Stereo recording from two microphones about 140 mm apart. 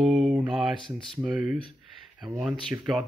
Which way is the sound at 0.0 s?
Centre (ahead or behind).